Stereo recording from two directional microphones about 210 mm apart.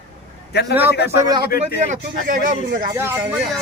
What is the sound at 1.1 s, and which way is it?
Speech, 20° right (ahead or behind).